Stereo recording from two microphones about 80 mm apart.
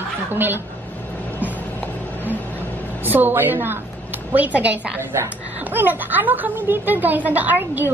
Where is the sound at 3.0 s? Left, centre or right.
Right.